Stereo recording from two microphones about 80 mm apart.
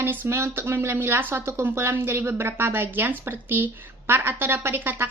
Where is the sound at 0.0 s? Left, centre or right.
Right.